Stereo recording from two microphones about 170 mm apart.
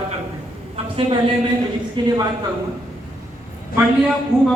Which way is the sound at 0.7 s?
35° right (ahead or behind).